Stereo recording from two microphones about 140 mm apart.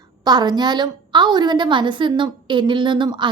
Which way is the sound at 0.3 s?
30° right (ahead or behind).